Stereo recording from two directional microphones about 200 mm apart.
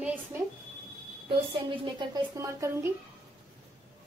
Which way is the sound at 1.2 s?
25° right (ahead or behind).